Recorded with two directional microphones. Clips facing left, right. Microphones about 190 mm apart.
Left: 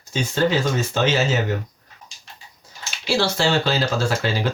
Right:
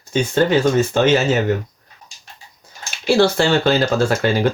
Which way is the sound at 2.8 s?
55° right (ahead or behind).